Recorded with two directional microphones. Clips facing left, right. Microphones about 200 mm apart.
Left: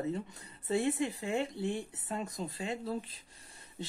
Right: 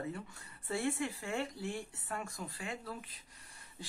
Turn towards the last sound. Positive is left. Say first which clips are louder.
# left 7 dB
turn(degrees=25)  # may be behind; listen again after turning